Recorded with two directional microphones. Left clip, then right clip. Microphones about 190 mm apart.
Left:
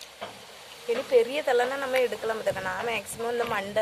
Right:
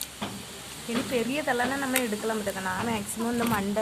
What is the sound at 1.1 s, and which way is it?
Speech, 50° left (ahead or behind).